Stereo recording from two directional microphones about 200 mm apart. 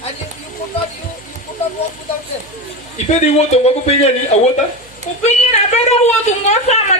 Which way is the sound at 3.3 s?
35° left (ahead or behind).